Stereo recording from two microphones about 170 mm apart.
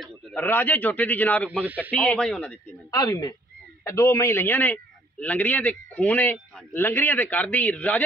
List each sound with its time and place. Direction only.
0.0 s speech: 10° left (ahead or behind)
1.5 s speech: 10° right (ahead or behind)
1.9 s speech: 5° left (ahead or behind)
2.9 s a man's voice: 20° left (ahead or behind)